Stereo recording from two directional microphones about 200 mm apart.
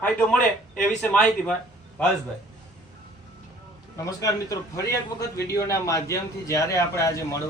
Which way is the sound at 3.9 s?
15° left (ahead or behind).